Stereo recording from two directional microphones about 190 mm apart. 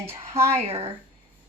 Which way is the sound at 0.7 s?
30° right (ahead or behind).